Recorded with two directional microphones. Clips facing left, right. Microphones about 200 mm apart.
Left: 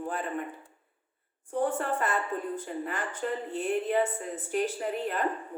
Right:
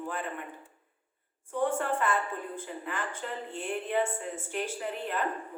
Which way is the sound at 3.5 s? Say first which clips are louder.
Left 3 dB; 40° left (ahead or behind).